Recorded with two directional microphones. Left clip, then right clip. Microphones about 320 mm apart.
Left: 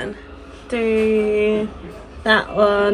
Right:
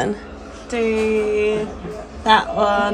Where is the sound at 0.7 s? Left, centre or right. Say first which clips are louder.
Left 1 dB; left.